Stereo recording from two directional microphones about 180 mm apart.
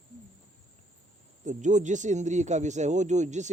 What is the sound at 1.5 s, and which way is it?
Speech, 40° right (ahead or behind).